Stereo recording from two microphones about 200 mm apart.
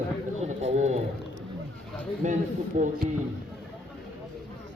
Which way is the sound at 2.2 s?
40° right (ahead or behind).